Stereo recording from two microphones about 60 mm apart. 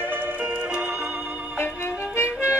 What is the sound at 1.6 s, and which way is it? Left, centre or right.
Music, left.